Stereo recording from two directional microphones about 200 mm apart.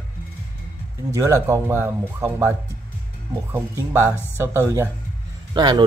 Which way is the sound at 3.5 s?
10° right (ahead or behind).